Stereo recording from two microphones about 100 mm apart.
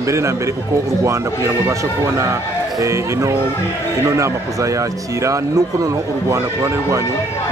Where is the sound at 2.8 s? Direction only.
30° right (ahead or behind).